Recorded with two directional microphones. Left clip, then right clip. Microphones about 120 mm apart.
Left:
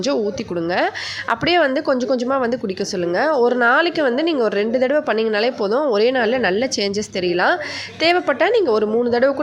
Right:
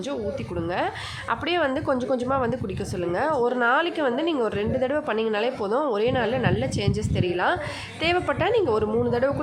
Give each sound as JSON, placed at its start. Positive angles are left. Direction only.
{"t": 1.3, "sound": "a woman's voice", "side_deg": 30}